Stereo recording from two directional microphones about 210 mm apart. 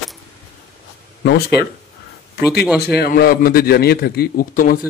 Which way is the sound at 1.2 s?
50° left (ahead or behind).